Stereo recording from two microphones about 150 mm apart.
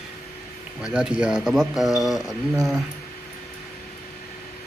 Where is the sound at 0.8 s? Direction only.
5° right (ahead or behind).